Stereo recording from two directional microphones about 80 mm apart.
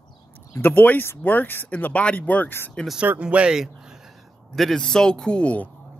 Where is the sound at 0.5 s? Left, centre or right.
Left.